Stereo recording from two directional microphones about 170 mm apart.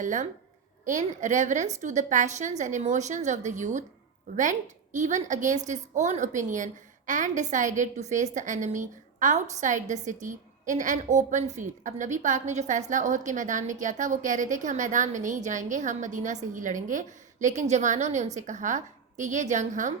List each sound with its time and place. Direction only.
0.0 s a woman's voice: 50° right (ahead or behind)